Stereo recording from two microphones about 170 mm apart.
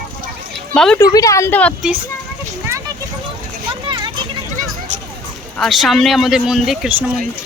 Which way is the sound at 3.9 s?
25° right (ahead or behind).